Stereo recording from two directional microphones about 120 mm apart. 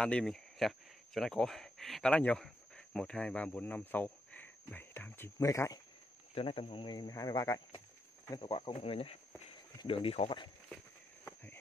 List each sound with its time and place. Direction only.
0.0 s speech: 5° left (ahead or behind); by 5.8 s 25° left (ahead or behind)
6.3 s speech: 50° left (ahead or behind); by 7.8 s 30° left (ahead or behind)
8.4 s speech: 45° left (ahead or behind)